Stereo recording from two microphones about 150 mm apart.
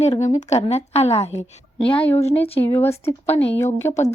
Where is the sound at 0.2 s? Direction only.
50° left (ahead or behind).